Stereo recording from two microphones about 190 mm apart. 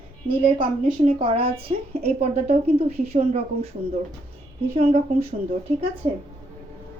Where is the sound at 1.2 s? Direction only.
30° right (ahead or behind).